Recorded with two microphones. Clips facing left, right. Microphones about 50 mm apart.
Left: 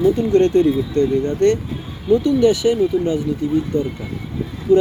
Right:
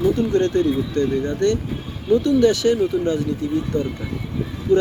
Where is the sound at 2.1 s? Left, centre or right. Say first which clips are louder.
Left 1 dB; centre.